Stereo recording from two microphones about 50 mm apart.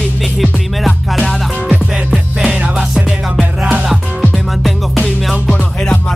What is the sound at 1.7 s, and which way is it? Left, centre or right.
Music, centre.